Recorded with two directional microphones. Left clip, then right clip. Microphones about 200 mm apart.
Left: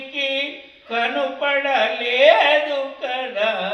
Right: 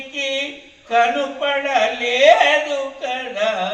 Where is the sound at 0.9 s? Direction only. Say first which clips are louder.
Right 5 dB; 10° right (ahead or behind).